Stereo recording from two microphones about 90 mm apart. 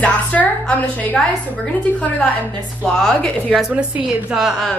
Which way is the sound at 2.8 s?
10° left (ahead or behind).